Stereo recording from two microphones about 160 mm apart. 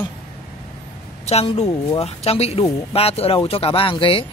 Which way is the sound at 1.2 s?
40° left (ahead or behind).